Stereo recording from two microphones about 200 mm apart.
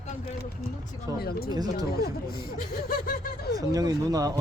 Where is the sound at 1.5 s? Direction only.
20° right (ahead or behind).